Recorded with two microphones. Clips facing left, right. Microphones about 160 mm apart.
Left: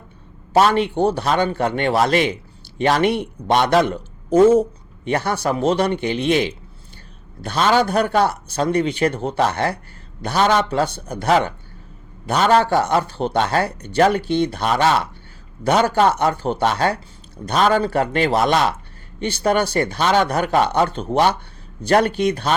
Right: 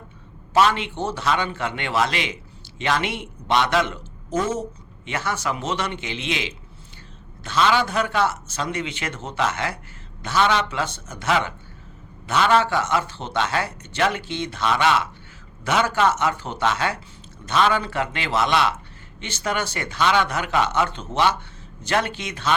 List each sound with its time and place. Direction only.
0.5 s a man's voice: 40° left (ahead or behind)
5.0 s speech: 35° left (ahead or behind)